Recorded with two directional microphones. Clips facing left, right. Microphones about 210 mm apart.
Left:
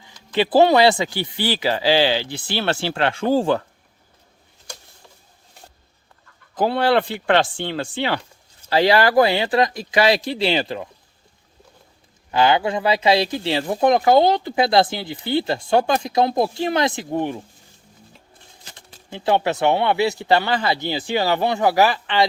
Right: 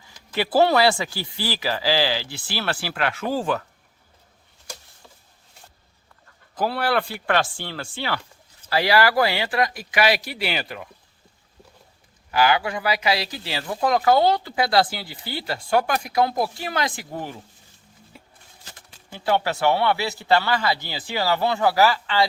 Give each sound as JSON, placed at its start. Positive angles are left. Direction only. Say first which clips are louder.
{"t": 0.0, "sound": "speech", "louder": "left 5 dB", "side_deg": 20}
{"t": 6.6, "sound": "speech", "louder": "left 5 dB", "side_deg": 25}
{"t": 12.3, "sound": "speech", "louder": "left 3 dB", "side_deg": 25}
{"t": 18.1, "sound": "a sound", "louder": "right 4 dB", "side_deg": -10}
{"t": 19.1, "sound": "speech", "louder": "left 3 dB", "side_deg": 25}